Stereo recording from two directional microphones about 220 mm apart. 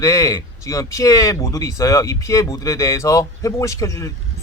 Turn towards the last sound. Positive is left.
turn(degrees=15)  # may be behind; listen again after turning